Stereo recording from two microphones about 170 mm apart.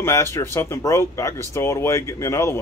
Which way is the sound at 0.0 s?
15° left (ahead or behind).